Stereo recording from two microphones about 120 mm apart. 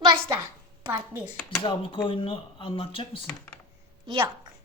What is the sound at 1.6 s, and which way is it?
Speech, 45° left (ahead or behind).